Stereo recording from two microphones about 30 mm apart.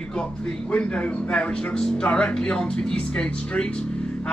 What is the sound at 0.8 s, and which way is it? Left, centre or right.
Speech, left.